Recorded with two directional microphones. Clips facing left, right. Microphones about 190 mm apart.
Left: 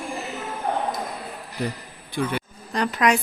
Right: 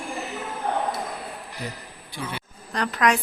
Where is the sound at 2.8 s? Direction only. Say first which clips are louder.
Left 2 dB; 5° left (ahead or behind).